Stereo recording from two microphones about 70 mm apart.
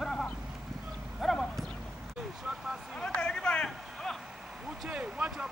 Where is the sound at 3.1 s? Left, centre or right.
Centre.